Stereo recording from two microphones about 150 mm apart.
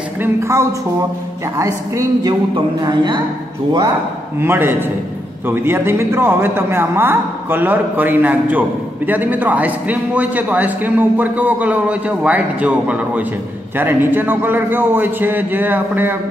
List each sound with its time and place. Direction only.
0.2 s a woman's voice: 20° right (ahead or behind)
4.4 s a man's voice: 15° right (ahead or behind)